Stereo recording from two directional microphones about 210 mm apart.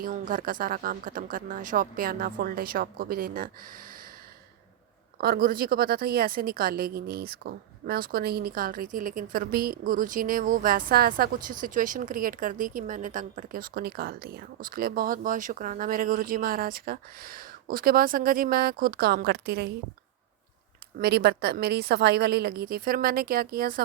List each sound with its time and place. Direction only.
0.0 s a woman's voice: 40° right (ahead or behind)
5.1 s a woman's voice: 45° right (ahead or behind)
21.0 s a woman's voice: 50° right (ahead or behind)